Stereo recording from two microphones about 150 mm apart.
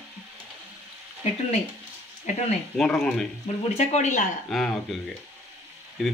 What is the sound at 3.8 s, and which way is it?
Speech, 50° left (ahead or behind).